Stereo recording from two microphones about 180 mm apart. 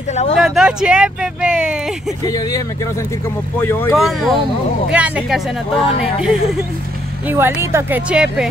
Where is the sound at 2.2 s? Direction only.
20° left (ahead or behind).